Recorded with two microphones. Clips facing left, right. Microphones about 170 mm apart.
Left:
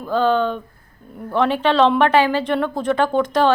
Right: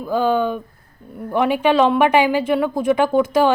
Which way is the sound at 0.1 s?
10° right (ahead or behind).